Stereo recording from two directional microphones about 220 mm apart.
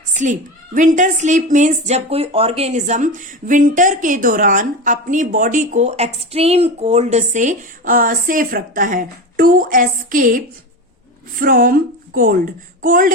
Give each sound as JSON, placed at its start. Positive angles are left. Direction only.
{"t": 0.1, "sound": "a woman's voice", "side_deg": -35}